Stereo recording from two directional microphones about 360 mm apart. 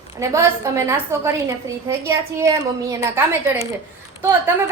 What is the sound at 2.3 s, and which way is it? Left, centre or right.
A woman's voice, centre.